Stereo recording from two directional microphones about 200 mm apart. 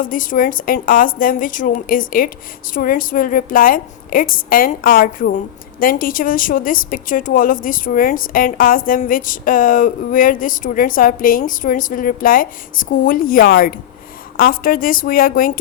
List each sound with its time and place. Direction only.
0.0 s a woman's voice: 45° left (ahead or behind)